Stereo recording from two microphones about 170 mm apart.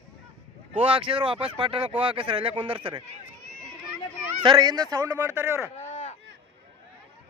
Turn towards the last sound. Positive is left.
turn(degrees=45)  # may be behind; listen again after turning